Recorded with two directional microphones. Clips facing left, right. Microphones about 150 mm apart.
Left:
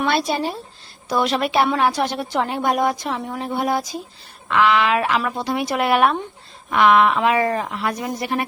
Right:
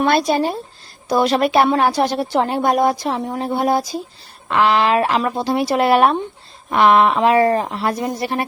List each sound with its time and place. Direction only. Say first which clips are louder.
0.0 s a woman's voice: right 5 dB; 45° right (ahead or behind)